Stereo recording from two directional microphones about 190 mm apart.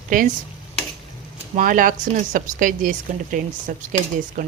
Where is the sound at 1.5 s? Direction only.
45° right (ahead or behind).